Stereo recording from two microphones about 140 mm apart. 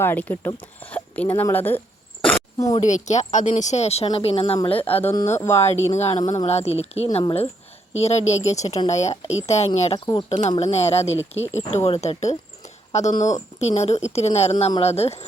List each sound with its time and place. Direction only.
0.0 s speech: 15° left (ahead or behind)
2.6 s speech: 25° left (ahead or behind)
2.8 s a woman's voice: 60° left (ahead or behind); by 4.9 s 40° left (ahead or behind)
4.9 s speech: 15° left (ahead or behind)
5.9 s speech: 50° left (ahead or behind)